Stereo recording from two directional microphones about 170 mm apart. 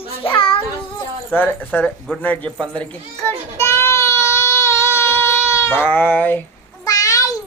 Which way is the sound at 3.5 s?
15° left (ahead or behind).